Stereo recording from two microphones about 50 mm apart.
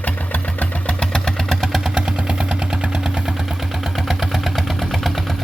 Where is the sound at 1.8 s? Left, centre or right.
Centre.